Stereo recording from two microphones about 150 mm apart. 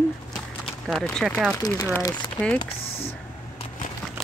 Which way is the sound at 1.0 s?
5° left (ahead or behind).